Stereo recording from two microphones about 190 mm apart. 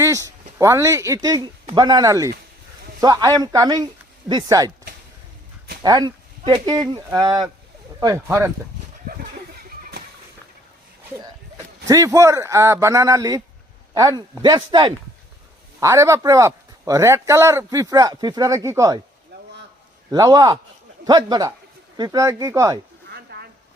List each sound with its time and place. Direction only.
0.0 s speech: 15° right (ahead or behind)
5.8 s speech: 20° right (ahead or behind)
11.9 s speech: 15° right (ahead or behind)
20.1 s speech: 20° right (ahead or behind)
23.0 s a sound: 60° right (ahead or behind)